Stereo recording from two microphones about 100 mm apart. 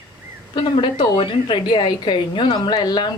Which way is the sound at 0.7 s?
55° left (ahead or behind).